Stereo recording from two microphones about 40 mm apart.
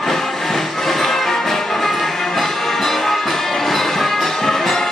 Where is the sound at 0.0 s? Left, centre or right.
Centre.